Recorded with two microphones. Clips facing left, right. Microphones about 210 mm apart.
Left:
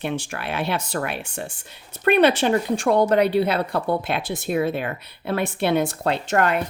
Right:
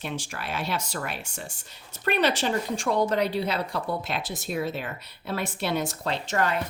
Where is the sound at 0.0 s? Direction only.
60° left (ahead or behind).